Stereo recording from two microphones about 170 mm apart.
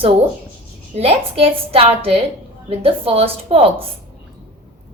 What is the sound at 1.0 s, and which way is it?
A woman's voice, 35° right (ahead or behind).